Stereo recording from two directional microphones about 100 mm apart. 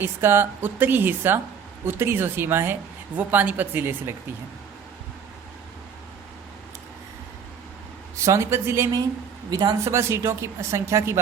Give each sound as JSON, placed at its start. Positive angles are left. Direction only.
{"t": 0.0, "sound": "a woman's voice", "side_deg": -25}
{"t": 8.1, "sound": "a woman's voice", "side_deg": -30}